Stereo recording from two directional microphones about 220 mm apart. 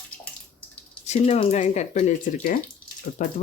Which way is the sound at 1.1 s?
30° left (ahead or behind).